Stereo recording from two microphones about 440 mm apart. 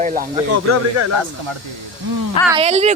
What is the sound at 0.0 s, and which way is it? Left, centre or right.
Speech, centre.